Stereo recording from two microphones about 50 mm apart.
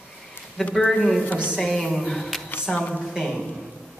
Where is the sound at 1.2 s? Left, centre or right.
Left.